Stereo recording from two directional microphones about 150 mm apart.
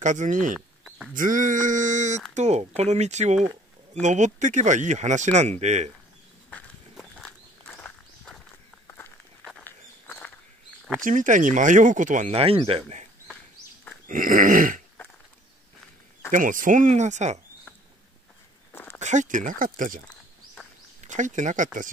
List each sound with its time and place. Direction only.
0.0 s speech: 60° right (ahead or behind)
0.8 s goat: 5° right (ahead or behind)
1.1 s speech: 60° right (ahead or behind)
6.5 s walk: 5° left (ahead or behind)
8.8 s walk: 15° left (ahead or behind)
11.0 s speech: 60° right (ahead or behind); by 13.1 s 45° right (ahead or behind)
14.0 s speech: 65° right (ahead or behind)
16.3 s speech: 60° right (ahead or behind)
18.7 s a sound: 15° left (ahead or behind)
18.9 s speech: 55° right (ahead or behind)
21.0 s speech: 55° right (ahead or behind)